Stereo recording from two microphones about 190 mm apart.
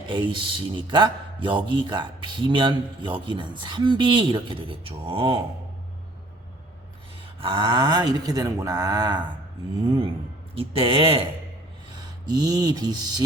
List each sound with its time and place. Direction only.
0.1 s a man's voice: 25° right (ahead or behind)
7.4 s a man's voice: 25° right (ahead or behind)